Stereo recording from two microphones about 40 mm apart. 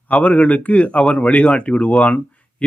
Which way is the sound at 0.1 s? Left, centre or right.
Left.